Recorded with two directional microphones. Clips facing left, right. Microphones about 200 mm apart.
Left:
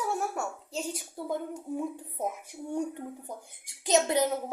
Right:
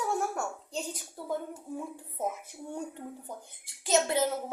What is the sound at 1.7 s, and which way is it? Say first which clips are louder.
A woman's voice: left 5 dB; 15° left (ahead or behind).